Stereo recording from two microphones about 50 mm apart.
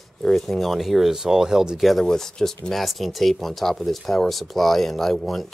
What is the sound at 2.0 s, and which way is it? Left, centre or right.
Speech, centre.